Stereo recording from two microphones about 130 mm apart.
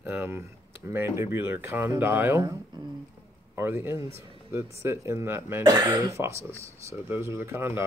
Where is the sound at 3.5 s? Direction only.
15° right (ahead or behind).